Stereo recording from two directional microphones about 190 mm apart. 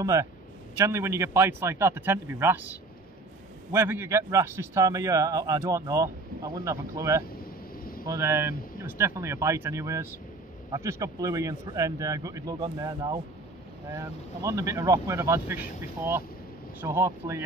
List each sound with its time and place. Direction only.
0.0 s speech: 15° right (ahead or behind)
16.8 s speech: 15° right (ahead or behind)